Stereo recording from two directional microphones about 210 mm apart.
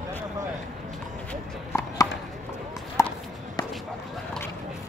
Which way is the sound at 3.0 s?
15° left (ahead or behind).